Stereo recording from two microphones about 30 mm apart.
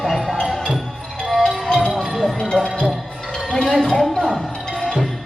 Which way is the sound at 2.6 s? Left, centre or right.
Left.